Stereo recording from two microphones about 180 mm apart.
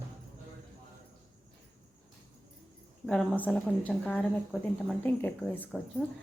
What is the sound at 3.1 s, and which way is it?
A woman's voice, 5° left (ahead or behind).